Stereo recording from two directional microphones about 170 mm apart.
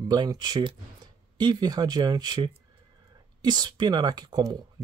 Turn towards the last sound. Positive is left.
turn(degrees=-25)  # may be behind; listen again after turning